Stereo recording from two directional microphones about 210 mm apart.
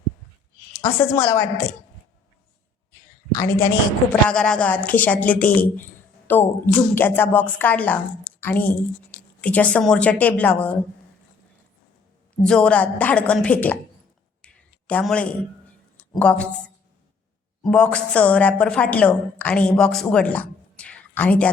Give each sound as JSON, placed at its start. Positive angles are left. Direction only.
{"t": 0.8, "sound": "a woman's voice", "side_deg": 10}
{"t": 3.3, "sound": "a woman's voice", "side_deg": 15}
{"t": 4.1, "sound": "a woman's voice", "side_deg": 5}
{"t": 12.3, "sound": "a woman's voice", "side_deg": 5}
{"t": 14.4, "sound": "a sound", "side_deg": 5}
{"t": 16.1, "sound": "a woman's voice", "side_deg": 5}